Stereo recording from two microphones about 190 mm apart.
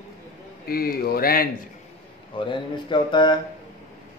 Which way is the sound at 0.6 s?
50° left (ahead or behind).